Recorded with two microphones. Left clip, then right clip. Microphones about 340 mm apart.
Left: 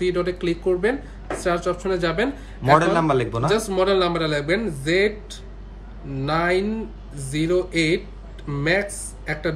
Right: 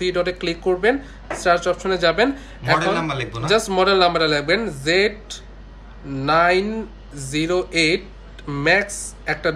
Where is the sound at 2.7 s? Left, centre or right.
Centre.